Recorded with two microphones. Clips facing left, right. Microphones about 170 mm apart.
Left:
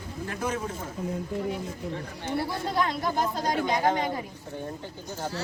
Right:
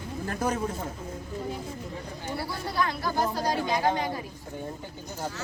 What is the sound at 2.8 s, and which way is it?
Speech, 20° left (ahead or behind).